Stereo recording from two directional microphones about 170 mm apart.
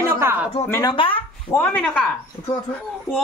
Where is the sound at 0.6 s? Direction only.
15° left (ahead or behind).